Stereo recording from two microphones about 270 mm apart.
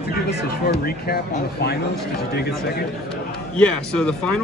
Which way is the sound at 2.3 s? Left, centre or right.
Left.